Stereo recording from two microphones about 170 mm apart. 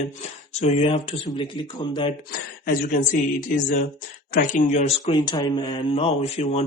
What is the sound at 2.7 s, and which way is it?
Speech, 50° left (ahead or behind).